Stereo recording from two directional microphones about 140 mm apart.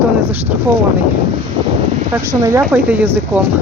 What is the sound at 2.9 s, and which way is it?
Speech, 10° right (ahead or behind).